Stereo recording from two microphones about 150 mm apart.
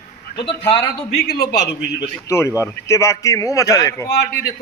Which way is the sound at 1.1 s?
85° left.